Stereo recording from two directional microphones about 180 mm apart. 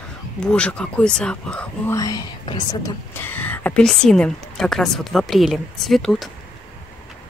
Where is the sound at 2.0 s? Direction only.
20° left (ahead or behind); by 6.3 s centre (ahead or behind).